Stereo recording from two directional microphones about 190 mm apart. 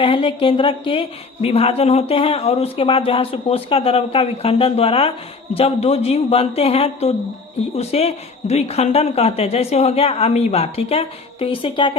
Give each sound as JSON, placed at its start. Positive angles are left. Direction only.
{"t": 0.0, "sound": "a woman's voice", "side_deg": 30}